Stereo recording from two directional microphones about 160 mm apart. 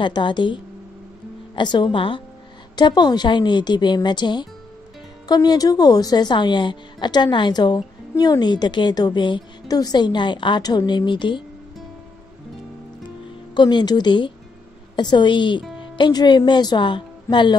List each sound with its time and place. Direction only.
0.0 s a woman's voice: 30° left (ahead or behind)
13.6 s a woman's voice: 30° left (ahead or behind)